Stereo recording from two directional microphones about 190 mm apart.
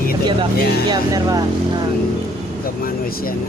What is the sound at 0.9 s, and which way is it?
Speech, 20° right (ahead or behind).